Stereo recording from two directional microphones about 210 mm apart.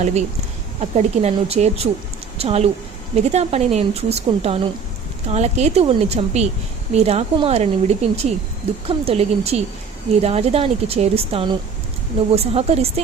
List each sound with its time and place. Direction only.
0.0 s a woman's voice: 35° right (ahead or behind)